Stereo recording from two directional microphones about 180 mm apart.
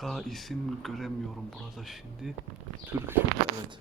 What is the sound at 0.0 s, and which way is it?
Speech, centre (ahead or behind).